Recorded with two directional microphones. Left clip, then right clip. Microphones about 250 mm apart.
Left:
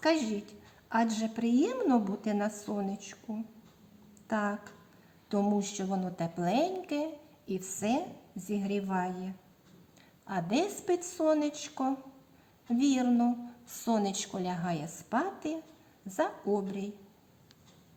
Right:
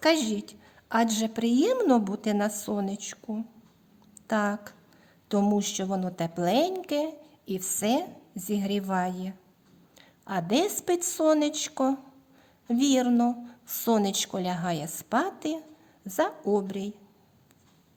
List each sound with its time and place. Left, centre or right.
0.0 s a woman's voice: right